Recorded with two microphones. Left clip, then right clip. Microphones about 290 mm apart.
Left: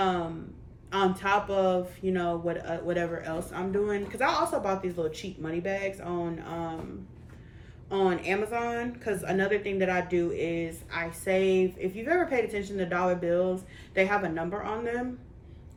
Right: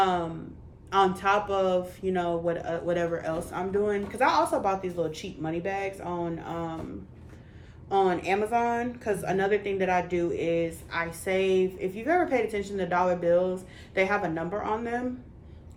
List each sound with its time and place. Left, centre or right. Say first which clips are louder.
0.0 s a woman's voice: right 3 dB; centre
7.9 s a woman's voice: right 3 dB; centre